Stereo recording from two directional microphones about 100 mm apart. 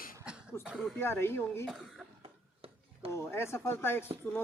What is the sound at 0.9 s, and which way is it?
Speech, 25° left (ahead or behind).